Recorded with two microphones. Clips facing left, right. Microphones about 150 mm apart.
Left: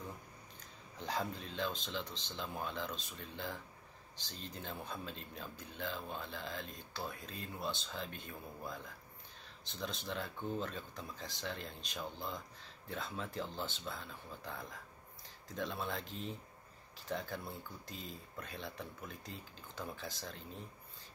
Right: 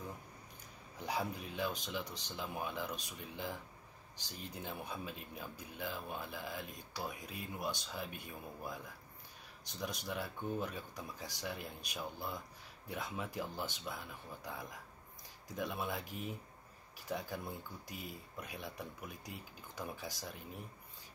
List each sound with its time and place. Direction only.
0.9 s speech: 10° right (ahead or behind)